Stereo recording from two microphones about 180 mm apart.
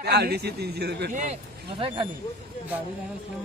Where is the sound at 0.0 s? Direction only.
60° right (ahead or behind).